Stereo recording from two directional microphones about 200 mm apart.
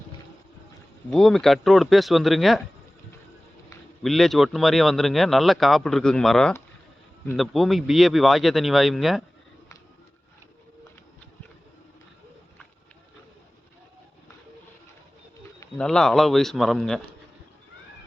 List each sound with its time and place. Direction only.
1.1 s speech: centre (ahead or behind)
4.0 s speech: centre (ahead or behind)
15.8 s speech: 5° left (ahead or behind)